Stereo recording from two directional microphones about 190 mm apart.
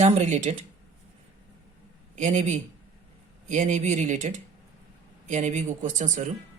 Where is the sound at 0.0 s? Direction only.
35° right (ahead or behind).